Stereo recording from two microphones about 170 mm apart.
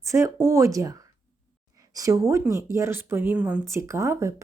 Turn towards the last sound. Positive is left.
turn(degrees=-15)  # may be behind; listen again after turning